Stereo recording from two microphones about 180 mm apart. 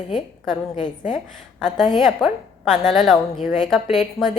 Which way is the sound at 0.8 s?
45° left (ahead or behind).